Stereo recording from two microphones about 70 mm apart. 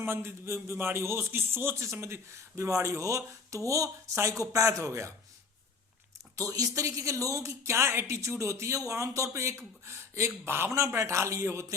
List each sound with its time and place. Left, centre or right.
0.0 s a man's voice: right
6.3 s speech: right